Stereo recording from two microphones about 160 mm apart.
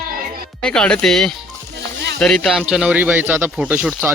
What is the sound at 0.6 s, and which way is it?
Speech, 5° left (ahead or behind).